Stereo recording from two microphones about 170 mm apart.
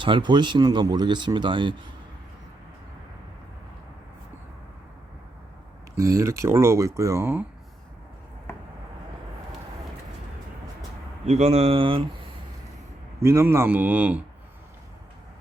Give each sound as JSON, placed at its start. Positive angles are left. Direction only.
{"t": 0.0, "sound": "speech", "side_deg": -25}
{"t": 6.0, "sound": "speech", "side_deg": -20}
{"t": 11.3, "sound": "speech", "side_deg": -40}
{"t": 13.2, "sound": "speech", "side_deg": -15}